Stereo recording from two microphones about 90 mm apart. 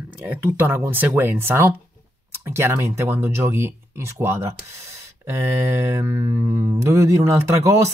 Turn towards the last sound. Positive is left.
turn(degrees=-35)  # may be behind; listen again after turning